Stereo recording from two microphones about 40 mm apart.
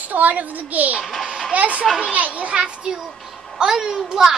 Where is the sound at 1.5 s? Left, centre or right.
Right; by 4.3 s centre.